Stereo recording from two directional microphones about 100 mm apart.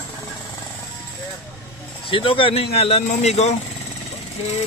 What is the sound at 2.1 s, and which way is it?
A man's voice, 60° left (ahead or behind).